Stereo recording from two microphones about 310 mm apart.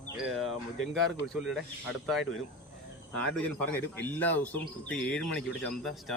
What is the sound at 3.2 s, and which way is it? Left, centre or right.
Speech, centre.